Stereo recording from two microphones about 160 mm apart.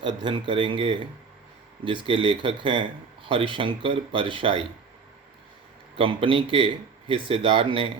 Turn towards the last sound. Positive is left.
turn(degrees=-35)  # may be behind; listen again after turning